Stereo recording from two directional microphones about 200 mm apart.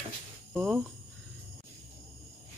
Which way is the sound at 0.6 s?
5° right (ahead or behind).